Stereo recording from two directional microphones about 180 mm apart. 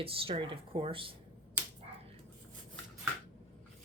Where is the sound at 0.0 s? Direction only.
30° right (ahead or behind).